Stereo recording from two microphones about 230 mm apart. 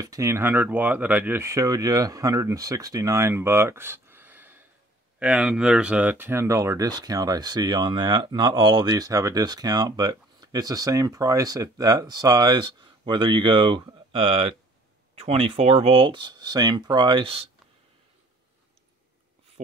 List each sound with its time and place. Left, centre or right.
0.0 s speech: centre